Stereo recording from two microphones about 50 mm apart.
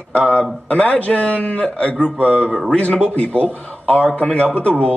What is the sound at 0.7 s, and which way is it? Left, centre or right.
A man's voice, left.